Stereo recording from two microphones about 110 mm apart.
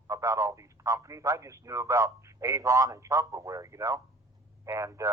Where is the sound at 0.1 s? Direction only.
25° right (ahead or behind).